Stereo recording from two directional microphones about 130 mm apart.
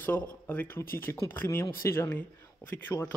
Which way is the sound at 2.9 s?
30° left (ahead or behind).